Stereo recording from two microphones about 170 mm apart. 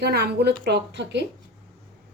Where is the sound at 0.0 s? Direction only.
70° right (ahead or behind); by 1.2 s 85° right.